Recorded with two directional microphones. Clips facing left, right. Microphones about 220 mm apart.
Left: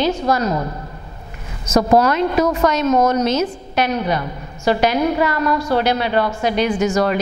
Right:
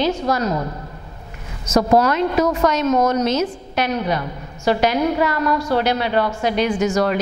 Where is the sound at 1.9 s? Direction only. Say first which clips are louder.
Left 1 dB; 10° left (ahead or behind).